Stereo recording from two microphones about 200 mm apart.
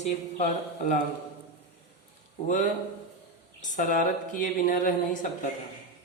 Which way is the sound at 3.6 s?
40° left (ahead or behind).